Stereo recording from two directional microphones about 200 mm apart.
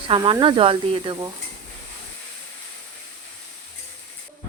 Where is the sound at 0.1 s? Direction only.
20° right (ahead or behind).